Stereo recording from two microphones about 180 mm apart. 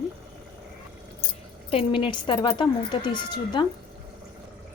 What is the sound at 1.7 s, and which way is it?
A woman's voice, 30° left (ahead or behind).